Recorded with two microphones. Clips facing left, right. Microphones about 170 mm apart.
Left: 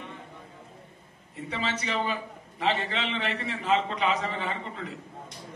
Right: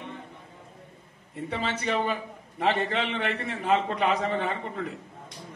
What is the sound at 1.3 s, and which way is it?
A man's voice, 55° right (ahead or behind).